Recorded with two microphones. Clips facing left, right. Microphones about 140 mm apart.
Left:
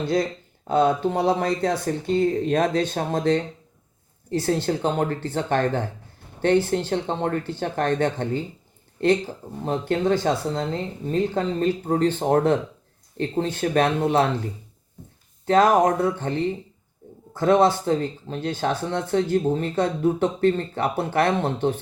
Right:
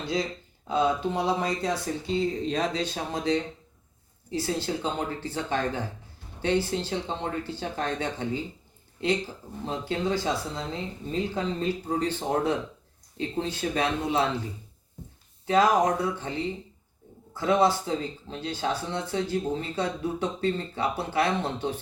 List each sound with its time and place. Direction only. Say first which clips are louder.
0.7 s speech: left 5 dB; 55° left (ahead or behind)